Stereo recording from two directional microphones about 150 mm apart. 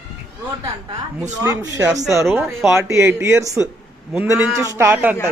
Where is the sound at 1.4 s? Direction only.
25° right (ahead or behind).